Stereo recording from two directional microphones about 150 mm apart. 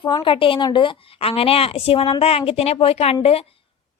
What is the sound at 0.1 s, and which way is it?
A woman's voice, 35° left (ahead or behind).